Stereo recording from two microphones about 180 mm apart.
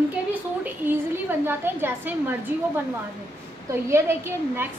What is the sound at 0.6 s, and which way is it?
A woman's voice, 10° right (ahead or behind).